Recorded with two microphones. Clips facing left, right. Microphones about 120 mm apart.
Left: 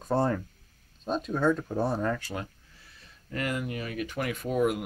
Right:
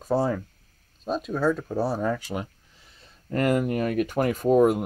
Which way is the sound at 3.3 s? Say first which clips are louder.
Right 9 dB; 45° right (ahead or behind).